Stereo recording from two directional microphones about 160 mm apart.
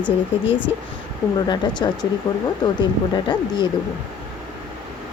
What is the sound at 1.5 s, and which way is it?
Speech, 25° left (ahead or behind).